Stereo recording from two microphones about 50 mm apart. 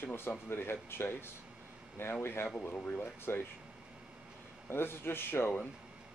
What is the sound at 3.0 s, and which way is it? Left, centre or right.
Speech, left.